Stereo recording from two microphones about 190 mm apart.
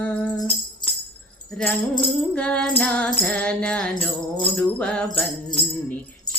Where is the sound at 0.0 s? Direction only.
5° left (ahead or behind).